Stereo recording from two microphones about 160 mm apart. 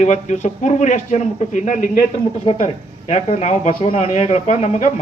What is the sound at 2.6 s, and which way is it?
A man's voice, 45° left (ahead or behind).